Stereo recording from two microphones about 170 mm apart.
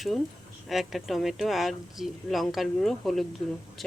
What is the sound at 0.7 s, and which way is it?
Speech, centre (ahead or behind).